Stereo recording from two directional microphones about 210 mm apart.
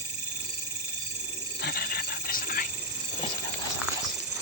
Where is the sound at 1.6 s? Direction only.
45° left (ahead or behind).